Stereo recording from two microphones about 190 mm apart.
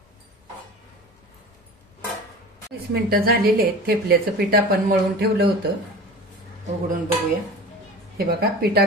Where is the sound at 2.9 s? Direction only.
55° right (ahead or behind).